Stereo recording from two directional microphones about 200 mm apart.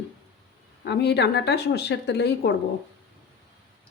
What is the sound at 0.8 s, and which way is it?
Speech, 55° left (ahead or behind).